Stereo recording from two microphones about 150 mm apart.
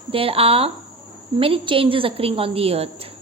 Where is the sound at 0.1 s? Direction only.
40° right (ahead or behind).